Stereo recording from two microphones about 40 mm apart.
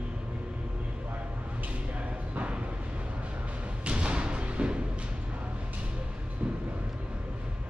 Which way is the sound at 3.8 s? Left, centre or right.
Right.